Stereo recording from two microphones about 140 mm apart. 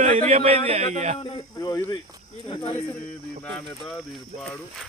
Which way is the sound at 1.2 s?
35° left (ahead or behind).